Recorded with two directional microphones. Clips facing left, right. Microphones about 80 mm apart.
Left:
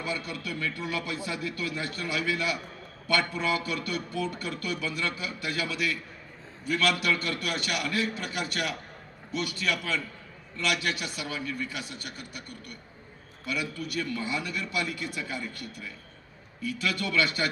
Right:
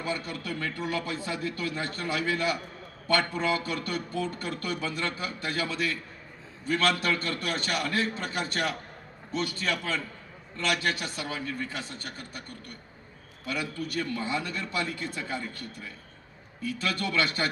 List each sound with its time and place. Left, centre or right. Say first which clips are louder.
0.0 s a man's voice: right 1 dB; right